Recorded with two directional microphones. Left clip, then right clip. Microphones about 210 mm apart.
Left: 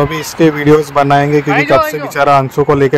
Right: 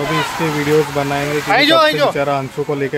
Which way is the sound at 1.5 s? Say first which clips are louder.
Left 1 dB; 35° right (ahead or behind).